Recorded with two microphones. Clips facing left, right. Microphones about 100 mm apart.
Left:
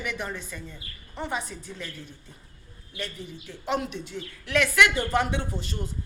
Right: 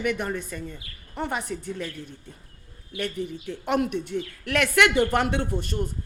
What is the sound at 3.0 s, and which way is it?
A woman's voice, 55° right (ahead or behind).